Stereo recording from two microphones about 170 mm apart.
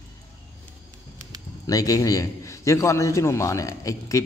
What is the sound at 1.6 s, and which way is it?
A man's voice, 20° left (ahead or behind).